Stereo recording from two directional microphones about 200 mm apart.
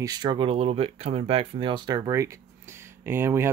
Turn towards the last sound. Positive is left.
turn(degrees=-10)  # may be behind; listen again after turning